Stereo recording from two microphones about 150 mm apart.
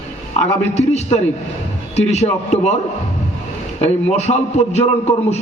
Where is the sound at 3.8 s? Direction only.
45° left (ahead or behind).